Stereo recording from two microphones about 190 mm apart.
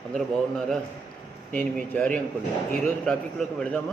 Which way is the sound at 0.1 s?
Centre (ahead or behind).